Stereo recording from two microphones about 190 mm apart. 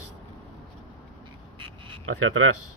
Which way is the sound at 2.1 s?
90° right.